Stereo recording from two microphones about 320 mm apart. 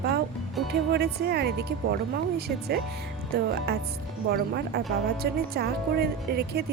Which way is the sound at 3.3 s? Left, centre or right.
Right.